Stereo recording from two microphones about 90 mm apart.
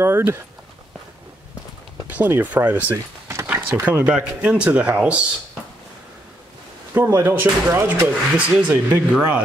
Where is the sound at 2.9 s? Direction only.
35° right (ahead or behind).